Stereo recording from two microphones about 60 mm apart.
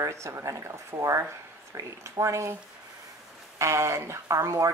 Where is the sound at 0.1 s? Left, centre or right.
Right.